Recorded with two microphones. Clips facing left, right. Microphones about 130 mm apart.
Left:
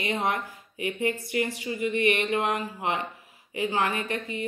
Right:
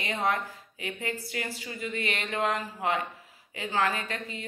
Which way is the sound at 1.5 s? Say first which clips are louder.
Left 7 dB; 20° left (ahead or behind).